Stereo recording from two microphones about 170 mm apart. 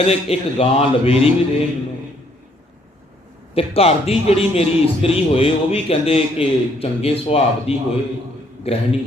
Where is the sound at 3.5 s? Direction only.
35° left (ahead or behind).